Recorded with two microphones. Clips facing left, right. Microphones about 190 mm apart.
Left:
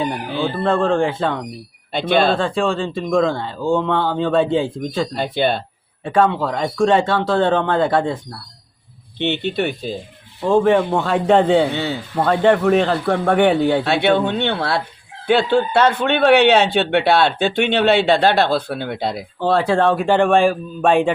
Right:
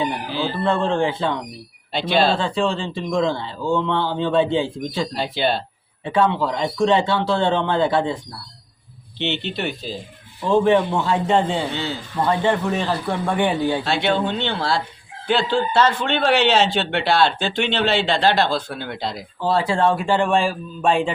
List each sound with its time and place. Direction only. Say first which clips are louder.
0.3 s speech: left 4 dB; 55° left (ahead or behind)
9.1 s speech: left 5 dB; 55° left (ahead or behind)